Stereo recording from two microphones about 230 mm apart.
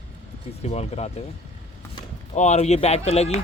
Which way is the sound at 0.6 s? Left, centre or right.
Left.